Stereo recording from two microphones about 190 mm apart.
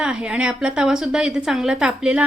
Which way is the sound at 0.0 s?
5° right (ahead or behind).